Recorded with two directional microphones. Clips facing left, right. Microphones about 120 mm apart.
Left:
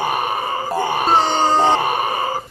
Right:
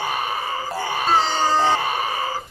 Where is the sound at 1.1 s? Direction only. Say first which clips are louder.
Left 2 dB; 55° left (ahead or behind).